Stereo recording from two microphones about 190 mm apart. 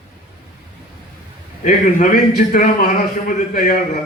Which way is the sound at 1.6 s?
40° left (ahead or behind).